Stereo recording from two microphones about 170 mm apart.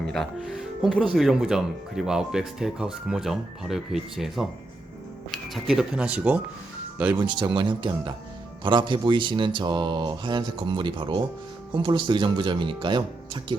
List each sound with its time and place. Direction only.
0.1 s speech: centre (ahead or behind)
7.2 s speech: 30° right (ahead or behind)